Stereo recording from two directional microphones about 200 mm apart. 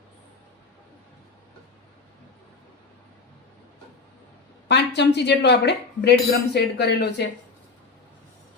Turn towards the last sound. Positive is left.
turn(degrees=55)  # may be behind; listen again after turning